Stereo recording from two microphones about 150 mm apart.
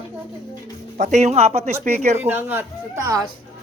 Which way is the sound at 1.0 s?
50° right (ahead or behind).